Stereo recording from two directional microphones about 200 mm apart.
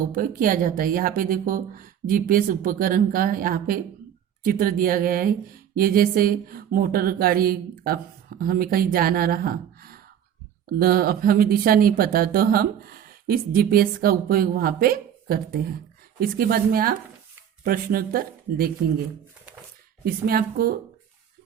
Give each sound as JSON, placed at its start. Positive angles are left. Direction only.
{"t": 0.0, "sound": "speech", "side_deg": -45}
{"t": 20.1, "sound": "speech", "side_deg": -50}